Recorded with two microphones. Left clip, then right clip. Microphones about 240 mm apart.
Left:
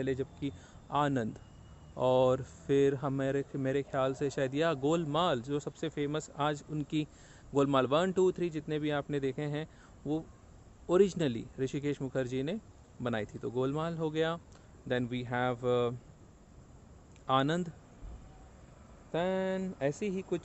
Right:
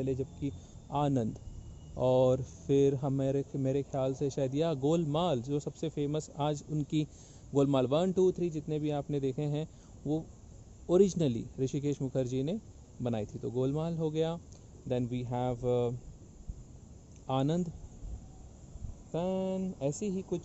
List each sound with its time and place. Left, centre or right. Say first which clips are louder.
0.0 s speech: even; centre
10.9 s speech: right 1 dB; centre
17.3 s speech: left 3 dB; centre
19.1 s speech: left 2 dB; left
20.0 s speech: left 1 dB; centre